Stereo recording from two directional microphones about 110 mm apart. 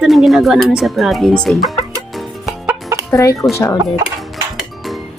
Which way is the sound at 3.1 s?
30° left (ahead or behind).